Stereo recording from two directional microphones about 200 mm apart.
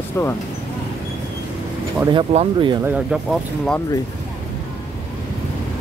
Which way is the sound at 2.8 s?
5° right (ahead or behind).